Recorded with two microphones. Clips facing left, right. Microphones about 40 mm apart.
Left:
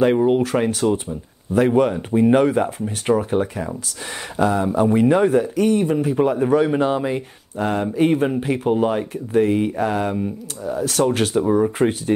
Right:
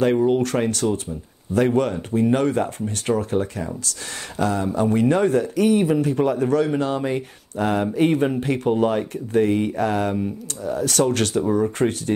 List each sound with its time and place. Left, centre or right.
0.0 s speech: centre
0.8 s speech: left
1.6 s speech: centre
5.7 s speech: centre
5.9 s speech: centre
7.0 s speech: centre